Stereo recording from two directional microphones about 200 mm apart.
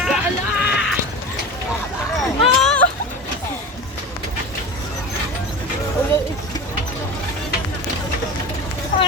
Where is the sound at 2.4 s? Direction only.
5° left (ahead or behind).